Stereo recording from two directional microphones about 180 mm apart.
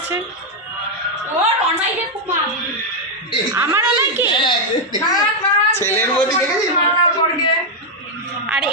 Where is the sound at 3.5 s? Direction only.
15° right (ahead or behind).